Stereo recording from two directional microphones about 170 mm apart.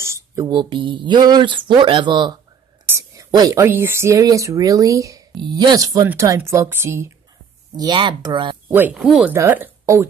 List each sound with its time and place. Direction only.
0.0 s speech: 15° right (ahead or behind)
7.7 s speech: 25° right (ahead or behind)
8.6 s speech: 10° right (ahead or behind)